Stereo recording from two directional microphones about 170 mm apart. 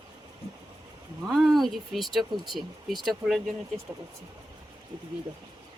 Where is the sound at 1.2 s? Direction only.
Centre (ahead or behind).